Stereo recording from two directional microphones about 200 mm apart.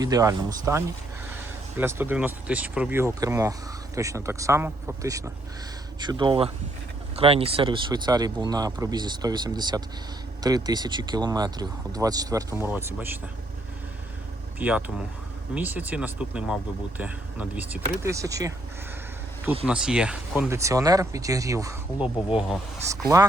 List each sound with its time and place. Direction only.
0.0 s speech: 15° right (ahead or behind)
1.8 s speech: 10° right (ahead or behind)
14.6 s speech: 5° right (ahead or behind)
19.6 s speech: 5° right (ahead or behind)
22.9 s speech: 15° right (ahead or behind)